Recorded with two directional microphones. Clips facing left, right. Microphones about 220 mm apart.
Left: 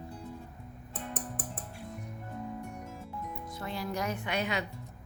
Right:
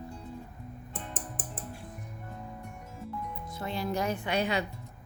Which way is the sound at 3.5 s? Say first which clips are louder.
Right 4 dB; 25° right (ahead or behind).